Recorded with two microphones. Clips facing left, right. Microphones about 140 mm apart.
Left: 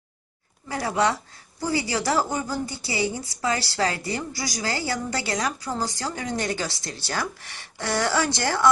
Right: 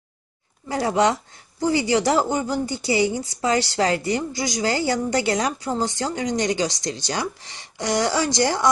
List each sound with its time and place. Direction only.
0.7 s speech: 25° right (ahead or behind)